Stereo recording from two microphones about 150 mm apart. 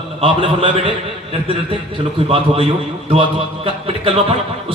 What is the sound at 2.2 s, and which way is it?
A man's voice, 40° right (ahead or behind).